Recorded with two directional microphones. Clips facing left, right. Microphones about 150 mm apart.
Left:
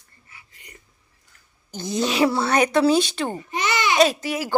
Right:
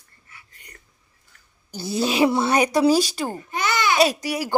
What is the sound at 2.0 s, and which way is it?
Speech, 25° right (ahead or behind).